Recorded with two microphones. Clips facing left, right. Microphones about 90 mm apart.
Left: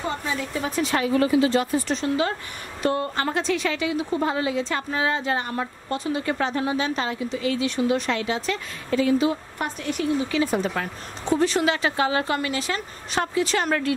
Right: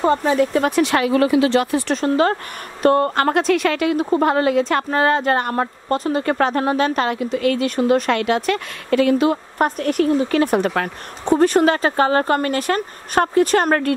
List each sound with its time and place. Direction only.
0.0 s speech: 50° right (ahead or behind); by 2.0 s 75° right (ahead or behind)
2.0 s speech: 50° right (ahead or behind)